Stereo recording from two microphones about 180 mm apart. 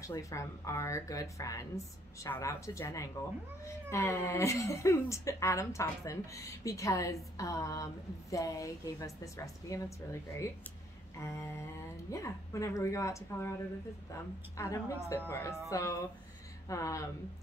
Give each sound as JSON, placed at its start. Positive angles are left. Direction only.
{"t": 0.0, "sound": "speech", "side_deg": 20}
{"t": 11.1, "sound": "speech", "side_deg": 15}